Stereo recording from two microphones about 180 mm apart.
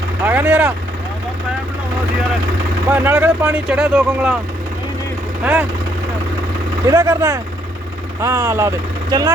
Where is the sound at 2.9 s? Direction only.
10° right (ahead or behind).